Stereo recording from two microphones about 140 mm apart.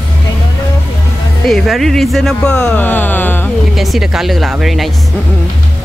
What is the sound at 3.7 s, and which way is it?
Speech, centre (ahead or behind).